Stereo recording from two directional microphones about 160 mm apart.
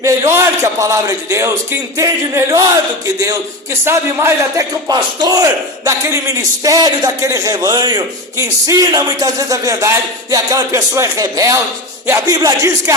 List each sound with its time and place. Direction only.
0.0 s speech: 15° right (ahead or behind)